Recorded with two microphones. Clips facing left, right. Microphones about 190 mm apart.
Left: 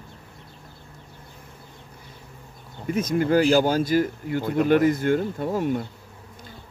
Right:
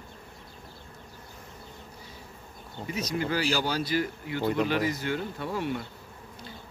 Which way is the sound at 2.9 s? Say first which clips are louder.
Left 9 dB; 50° left (ahead or behind).